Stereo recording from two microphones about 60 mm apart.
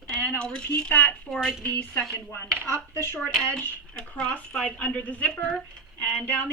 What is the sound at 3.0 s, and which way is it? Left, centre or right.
Speech, left.